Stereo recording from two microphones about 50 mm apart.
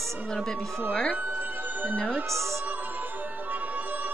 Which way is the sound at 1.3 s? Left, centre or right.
Right.